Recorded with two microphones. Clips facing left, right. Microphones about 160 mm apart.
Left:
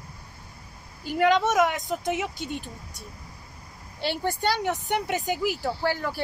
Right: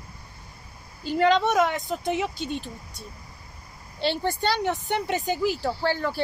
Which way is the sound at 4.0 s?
10° left (ahead or behind).